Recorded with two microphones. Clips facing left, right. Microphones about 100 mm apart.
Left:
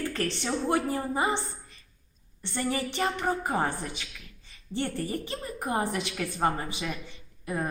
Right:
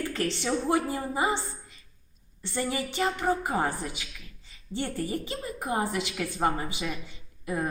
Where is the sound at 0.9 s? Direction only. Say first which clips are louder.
Left 1 dB; 30° left (ahead or behind).